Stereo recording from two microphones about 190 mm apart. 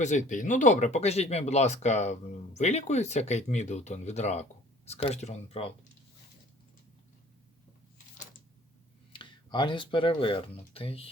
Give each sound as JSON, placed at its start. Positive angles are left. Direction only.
{"t": 0.0, "sound": "speech", "side_deg": 40}
{"t": 9.1, "sound": "speech", "side_deg": 25}